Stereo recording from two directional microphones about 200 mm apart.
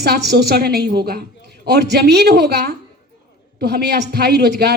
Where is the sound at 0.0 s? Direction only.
55° right (ahead or behind).